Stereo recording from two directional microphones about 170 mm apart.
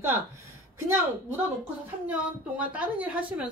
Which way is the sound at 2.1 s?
10° right (ahead or behind).